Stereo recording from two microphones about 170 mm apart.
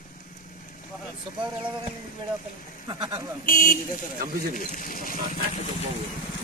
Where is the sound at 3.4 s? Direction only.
50° left (ahead or behind).